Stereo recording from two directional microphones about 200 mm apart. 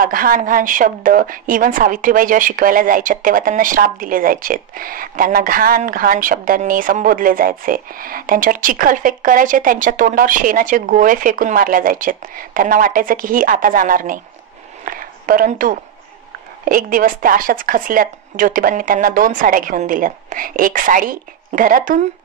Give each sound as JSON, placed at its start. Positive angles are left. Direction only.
{"t": 0.0, "sound": "a woman's voice", "side_deg": -45}